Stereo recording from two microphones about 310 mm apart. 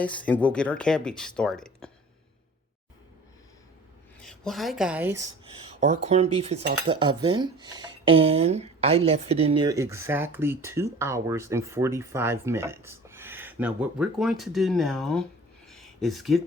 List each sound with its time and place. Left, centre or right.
0.0 s speech: centre
4.2 s a woman's voice: centre
5.8 s speech: right; by 15.2 s centre
15.6 s a sound: centre